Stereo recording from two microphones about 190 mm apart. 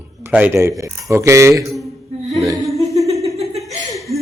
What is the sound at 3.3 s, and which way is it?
Laughter, centre (ahead or behind).